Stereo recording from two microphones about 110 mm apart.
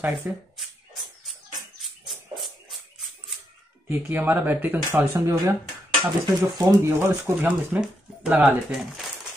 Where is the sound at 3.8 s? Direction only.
20° right (ahead or behind).